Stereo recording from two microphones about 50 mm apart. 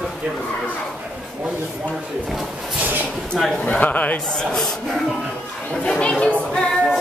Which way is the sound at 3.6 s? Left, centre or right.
Left.